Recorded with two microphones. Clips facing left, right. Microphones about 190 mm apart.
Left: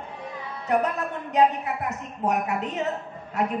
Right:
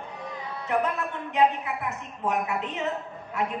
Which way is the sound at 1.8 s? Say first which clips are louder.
Left 4 dB; 40° left (ahead or behind).